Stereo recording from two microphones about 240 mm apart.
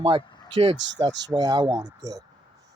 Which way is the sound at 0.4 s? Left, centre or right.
Right.